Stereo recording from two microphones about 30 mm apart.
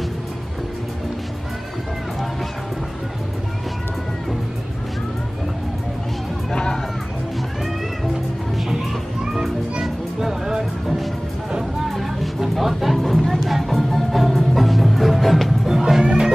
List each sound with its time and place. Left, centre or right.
8.6 s music: centre
11.8 s music: centre
12.9 s music: centre
16.0 s music: right